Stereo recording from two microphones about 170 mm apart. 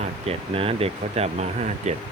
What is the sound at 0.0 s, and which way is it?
Speech, 35° right (ahead or behind).